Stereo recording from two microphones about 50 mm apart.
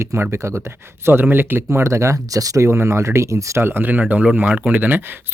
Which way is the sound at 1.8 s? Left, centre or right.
Right.